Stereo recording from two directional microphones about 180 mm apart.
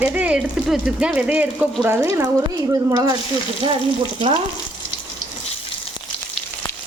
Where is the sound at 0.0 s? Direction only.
10° right (ahead or behind).